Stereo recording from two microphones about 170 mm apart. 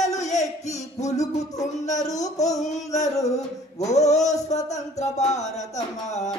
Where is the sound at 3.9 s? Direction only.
40° left (ahead or behind).